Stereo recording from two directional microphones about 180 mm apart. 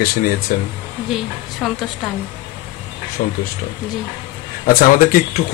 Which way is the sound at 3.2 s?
55° left (ahead or behind).